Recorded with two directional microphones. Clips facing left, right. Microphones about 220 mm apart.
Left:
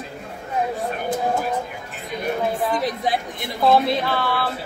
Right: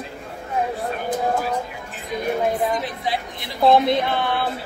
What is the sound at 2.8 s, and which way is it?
Speech, 45° left (ahead or behind).